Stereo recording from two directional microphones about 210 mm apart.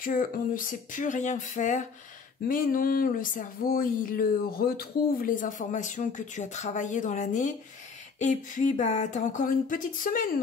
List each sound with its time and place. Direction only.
0.0 s speech: 40° left (ahead or behind)